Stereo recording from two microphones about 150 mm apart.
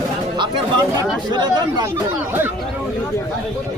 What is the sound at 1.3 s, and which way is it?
Speech, 30° right (ahead or behind).